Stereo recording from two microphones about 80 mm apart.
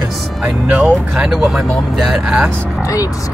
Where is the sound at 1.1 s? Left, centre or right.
Centre.